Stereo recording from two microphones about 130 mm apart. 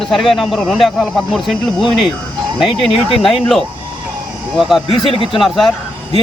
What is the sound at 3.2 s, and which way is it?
Speech, centre (ahead or behind).